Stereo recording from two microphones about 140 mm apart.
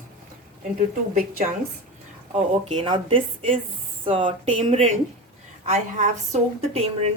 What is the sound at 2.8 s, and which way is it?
A woman's voice, 40° right (ahead or behind).